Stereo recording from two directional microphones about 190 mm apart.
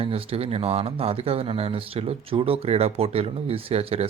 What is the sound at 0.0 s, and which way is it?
Speech, 30° right (ahead or behind).